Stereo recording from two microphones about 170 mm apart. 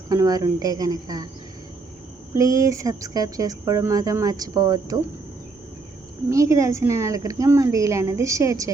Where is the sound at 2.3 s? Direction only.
20° right (ahead or behind).